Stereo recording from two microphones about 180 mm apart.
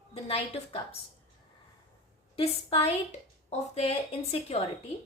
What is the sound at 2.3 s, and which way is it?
A woman's voice, 35° left (ahead or behind).